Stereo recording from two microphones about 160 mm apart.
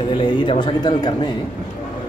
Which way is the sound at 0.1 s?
30° left (ahead or behind).